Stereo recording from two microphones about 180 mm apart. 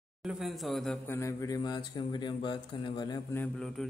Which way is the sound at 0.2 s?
5° right (ahead or behind).